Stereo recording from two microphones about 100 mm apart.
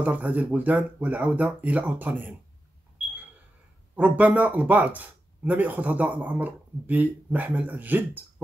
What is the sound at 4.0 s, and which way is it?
Speech, 15° right (ahead or behind).